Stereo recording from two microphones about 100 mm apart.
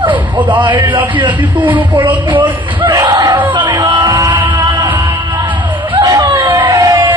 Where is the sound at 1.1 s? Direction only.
50° right (ahead or behind).